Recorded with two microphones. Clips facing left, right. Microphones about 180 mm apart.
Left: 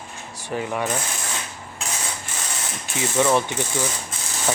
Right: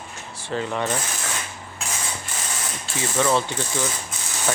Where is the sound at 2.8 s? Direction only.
15° left (ahead or behind).